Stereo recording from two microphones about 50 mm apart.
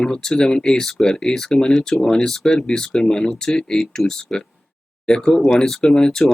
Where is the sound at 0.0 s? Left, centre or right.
Centre.